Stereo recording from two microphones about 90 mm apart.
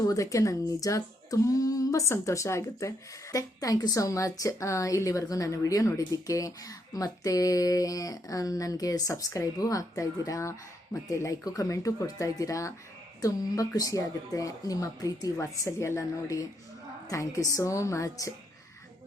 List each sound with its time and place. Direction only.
0.0 s a woman's voice: 40° left (ahead or behind)